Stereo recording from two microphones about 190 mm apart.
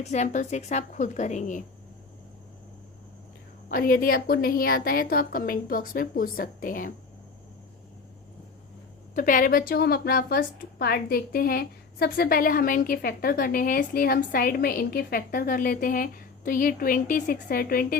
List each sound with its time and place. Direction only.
0.0 s a woman's voice: 40° left (ahead or behind)
3.7 s a woman's voice: 50° left (ahead or behind)
9.1 s a woman's voice: 45° left (ahead or behind)